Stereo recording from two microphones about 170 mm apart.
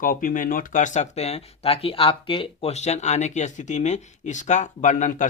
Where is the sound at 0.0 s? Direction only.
55° left (ahead or behind).